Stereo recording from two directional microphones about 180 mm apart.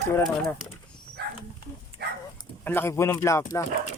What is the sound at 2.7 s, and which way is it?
Speech, 10° left (ahead or behind).